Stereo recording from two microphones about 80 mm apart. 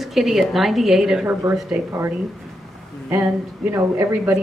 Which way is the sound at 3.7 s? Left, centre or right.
Right.